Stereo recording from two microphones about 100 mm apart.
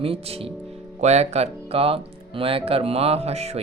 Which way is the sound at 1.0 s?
90° right.